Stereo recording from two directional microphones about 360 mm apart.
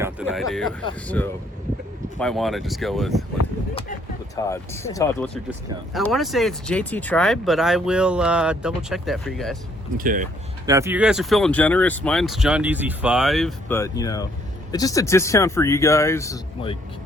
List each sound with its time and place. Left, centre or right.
0.0 s speech: centre
4.4 s speech: centre
10.0 s speech: right
10.7 s speech: centre